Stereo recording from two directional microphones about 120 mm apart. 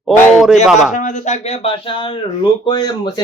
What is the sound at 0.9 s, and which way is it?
Speech, 90° left.